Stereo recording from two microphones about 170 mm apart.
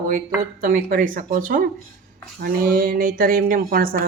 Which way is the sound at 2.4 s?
60° right (ahead or behind).